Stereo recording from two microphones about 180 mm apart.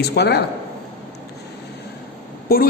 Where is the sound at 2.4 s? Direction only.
55° left (ahead or behind).